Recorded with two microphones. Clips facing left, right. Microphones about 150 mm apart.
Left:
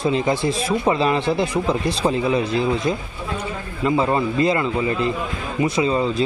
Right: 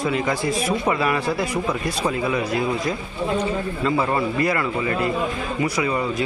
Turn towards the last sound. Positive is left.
turn(degrees=25)  # may be behind; listen again after turning